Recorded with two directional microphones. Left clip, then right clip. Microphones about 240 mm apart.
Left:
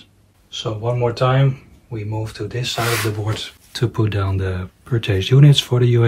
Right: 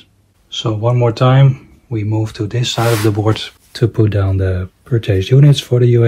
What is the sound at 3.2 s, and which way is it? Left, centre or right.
Speech, centre.